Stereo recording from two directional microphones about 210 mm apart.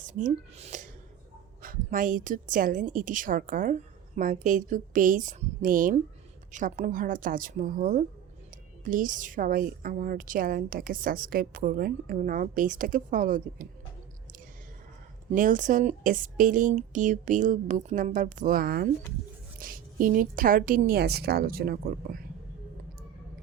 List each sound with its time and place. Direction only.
0.0 s a woman's voice: 35° right (ahead or behind)
15.3 s a woman's voice: 40° right (ahead or behind)